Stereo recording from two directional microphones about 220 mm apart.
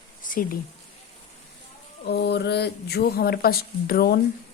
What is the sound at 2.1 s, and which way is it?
Speech, 50° left (ahead or behind).